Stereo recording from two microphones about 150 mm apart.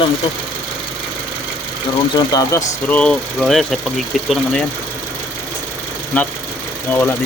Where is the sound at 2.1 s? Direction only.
25° left (ahead or behind).